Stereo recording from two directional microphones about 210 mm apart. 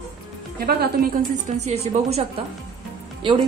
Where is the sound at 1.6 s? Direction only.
30° right (ahead or behind).